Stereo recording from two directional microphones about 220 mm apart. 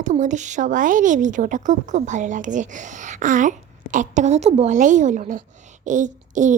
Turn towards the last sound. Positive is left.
turn(degrees=-35)  # may be behind; listen again after turning